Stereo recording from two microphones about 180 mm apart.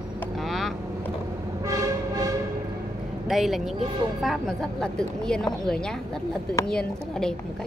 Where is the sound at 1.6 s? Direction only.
20° right (ahead or behind).